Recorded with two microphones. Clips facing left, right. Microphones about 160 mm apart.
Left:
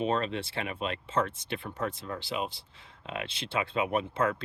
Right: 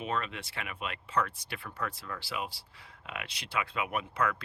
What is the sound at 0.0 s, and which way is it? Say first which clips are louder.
Speech: left 6 dB; 30° left (ahead or behind).